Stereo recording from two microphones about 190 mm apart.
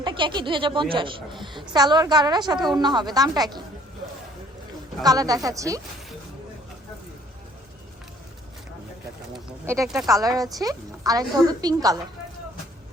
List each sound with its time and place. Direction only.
0.0 s a woman's voice: 25° right (ahead or behind)
5.0 s a woman's voice: 20° right (ahead or behind)
9.8 s a woman's voice: centre (ahead or behind)
10.1 s a woman's voice: 20° right (ahead or behind)